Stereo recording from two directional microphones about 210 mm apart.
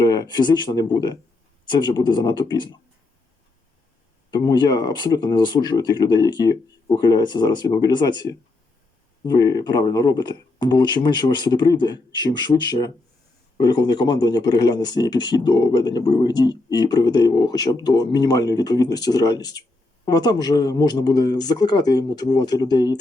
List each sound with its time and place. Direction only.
0.0 s speech: 20° left (ahead or behind)
4.3 s speech: 20° left (ahead or behind)